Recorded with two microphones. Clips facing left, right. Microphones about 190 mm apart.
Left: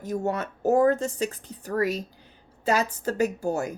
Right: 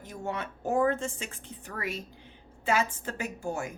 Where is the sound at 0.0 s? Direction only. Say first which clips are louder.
Left 8 dB; 40° left (ahead or behind).